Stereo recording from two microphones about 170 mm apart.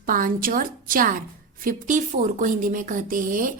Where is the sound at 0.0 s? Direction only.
55° right (ahead or behind).